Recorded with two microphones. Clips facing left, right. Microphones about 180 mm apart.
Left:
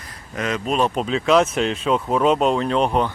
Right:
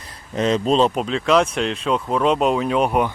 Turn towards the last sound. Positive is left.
turn(degrees=-10)  # may be behind; listen again after turning